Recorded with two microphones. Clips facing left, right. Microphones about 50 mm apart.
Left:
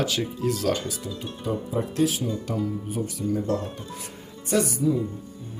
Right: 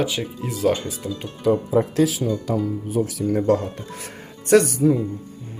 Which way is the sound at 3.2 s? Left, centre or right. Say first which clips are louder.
Right 2 dB; right.